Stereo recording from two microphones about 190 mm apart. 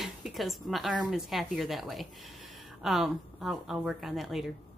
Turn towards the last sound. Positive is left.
turn(degrees=0)  # may be behind; listen again after turning